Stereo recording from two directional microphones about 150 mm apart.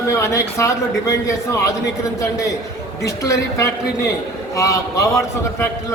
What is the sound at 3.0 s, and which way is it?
A woman's voice, 20° left (ahead or behind).